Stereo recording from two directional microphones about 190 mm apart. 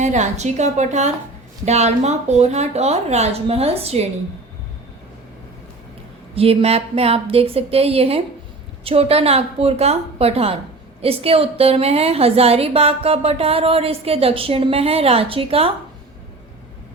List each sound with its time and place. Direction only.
0.0 s a woman's voice: 40° right (ahead or behind)
6.3 s a woman's voice: 30° right (ahead or behind)